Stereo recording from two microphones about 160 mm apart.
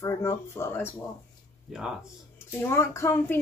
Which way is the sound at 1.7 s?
5° right (ahead or behind).